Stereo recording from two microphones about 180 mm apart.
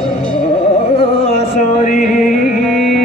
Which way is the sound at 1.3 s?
45° left (ahead or behind).